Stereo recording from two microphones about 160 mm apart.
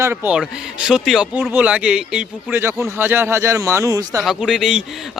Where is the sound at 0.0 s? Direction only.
15° right (ahead or behind).